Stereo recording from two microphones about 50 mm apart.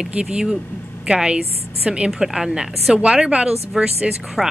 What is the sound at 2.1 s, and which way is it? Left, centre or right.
Speech, centre.